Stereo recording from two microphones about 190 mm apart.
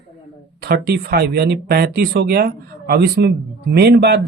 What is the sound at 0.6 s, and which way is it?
Speech, 55° right (ahead or behind).